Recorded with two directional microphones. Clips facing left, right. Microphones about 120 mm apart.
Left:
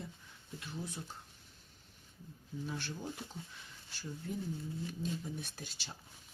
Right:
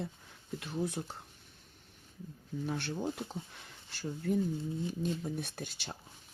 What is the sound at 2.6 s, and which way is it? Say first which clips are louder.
Speech: right 7 dB; 60° right (ahead or behind).